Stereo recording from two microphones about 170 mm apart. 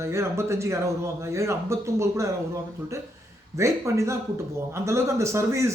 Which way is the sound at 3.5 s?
15° right (ahead or behind).